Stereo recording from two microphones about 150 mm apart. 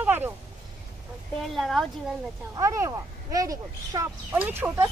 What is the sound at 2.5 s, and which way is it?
Speech, 20° right (ahead or behind).